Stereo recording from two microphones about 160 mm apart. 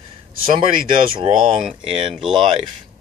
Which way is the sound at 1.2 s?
30° right (ahead or behind).